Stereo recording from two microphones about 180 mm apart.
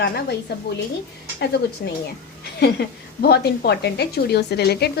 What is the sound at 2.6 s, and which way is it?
A woman's voice, 65° left (ahead or behind).